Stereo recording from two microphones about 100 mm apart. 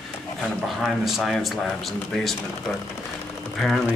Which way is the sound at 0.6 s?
Centre (ahead or behind).